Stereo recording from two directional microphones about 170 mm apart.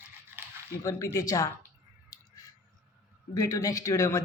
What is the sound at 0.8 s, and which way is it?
Speech, 20° left (ahead or behind).